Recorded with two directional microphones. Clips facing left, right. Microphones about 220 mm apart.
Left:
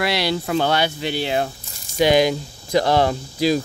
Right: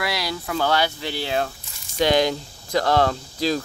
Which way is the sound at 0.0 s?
30° left (ahead or behind).